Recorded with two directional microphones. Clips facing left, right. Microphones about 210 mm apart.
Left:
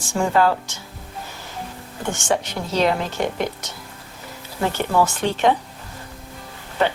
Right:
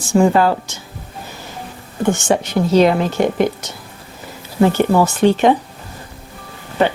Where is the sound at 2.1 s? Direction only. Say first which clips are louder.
Right 6 dB; 5° right (ahead or behind).